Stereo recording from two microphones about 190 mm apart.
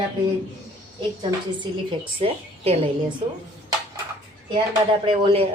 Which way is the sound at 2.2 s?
30° right (ahead or behind).